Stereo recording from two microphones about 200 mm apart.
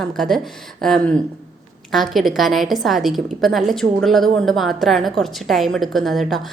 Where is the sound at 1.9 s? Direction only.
Centre (ahead or behind).